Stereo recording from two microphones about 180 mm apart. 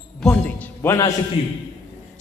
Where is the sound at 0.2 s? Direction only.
10° left (ahead or behind).